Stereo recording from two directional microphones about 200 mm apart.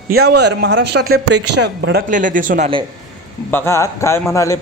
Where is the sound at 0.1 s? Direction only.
55° right (ahead or behind).